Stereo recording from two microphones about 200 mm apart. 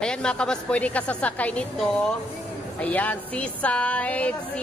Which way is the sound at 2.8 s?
5° left (ahead or behind).